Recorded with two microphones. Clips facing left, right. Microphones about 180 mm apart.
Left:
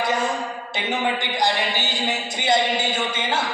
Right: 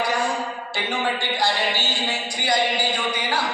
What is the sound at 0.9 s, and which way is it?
A man's voice, 20° left (ahead or behind).